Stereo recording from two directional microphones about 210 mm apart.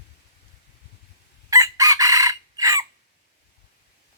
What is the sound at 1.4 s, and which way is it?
Chicken, 15° right (ahead or behind).